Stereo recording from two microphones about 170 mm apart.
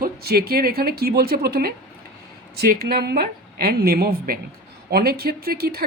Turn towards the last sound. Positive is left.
turn(degrees=-65)  # may be behind; listen again after turning